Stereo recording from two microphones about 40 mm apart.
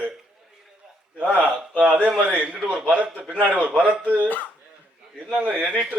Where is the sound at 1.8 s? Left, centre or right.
Right.